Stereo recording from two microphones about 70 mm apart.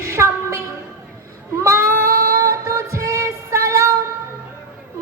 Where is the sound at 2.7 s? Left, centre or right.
Right.